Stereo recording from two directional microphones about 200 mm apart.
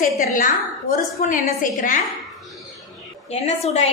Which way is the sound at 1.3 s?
40° left (ahead or behind).